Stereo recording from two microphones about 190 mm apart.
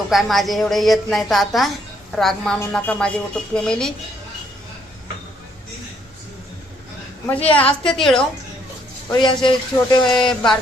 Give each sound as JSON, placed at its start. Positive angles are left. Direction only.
{"t": 0.1, "sound": "a woman's voice", "side_deg": 0}
{"t": 7.3, "sound": "a woman's voice", "side_deg": 10}
{"t": 9.1, "sound": "speech", "side_deg": 25}
{"t": 10.2, "sound": "a woman's voice", "side_deg": 5}